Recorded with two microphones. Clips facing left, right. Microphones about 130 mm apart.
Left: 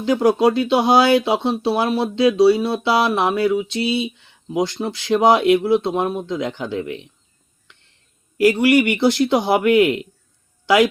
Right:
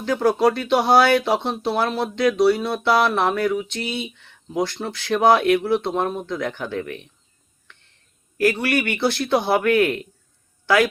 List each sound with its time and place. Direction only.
0.0 s speech: 15° left (ahead or behind)
7.7 s a sound: 15° left (ahead or behind)
8.4 s speech: 15° left (ahead or behind)